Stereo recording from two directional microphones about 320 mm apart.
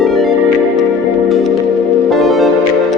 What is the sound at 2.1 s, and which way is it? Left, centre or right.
Music, centre.